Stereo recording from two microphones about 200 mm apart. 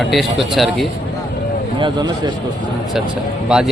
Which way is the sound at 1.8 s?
20° right (ahead or behind).